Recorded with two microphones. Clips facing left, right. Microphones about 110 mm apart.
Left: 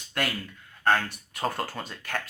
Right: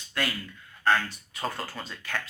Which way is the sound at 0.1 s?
50° left (ahead or behind).